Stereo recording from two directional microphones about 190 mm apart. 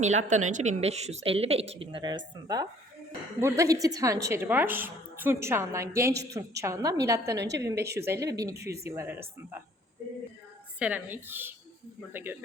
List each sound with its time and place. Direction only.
0.0 s a woman's voice: 40° right (ahead or behind); by 9.6 s 10° right (ahead or behind)
10.8 s a woman's voice: 5° right (ahead or behind)